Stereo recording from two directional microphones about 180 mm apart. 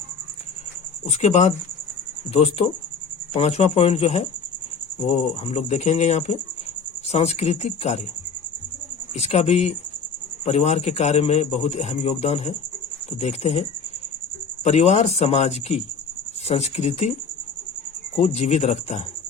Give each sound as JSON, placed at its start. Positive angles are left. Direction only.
{"t": 1.0, "sound": "a man's voice", "side_deg": 35}
{"t": 9.2, "sound": "a man's voice", "side_deg": 35}
{"t": 18.2, "sound": "a man's voice", "side_deg": 40}